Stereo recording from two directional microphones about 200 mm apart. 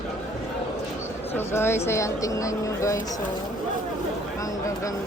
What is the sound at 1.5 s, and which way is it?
Speech, 10° left (ahead or behind).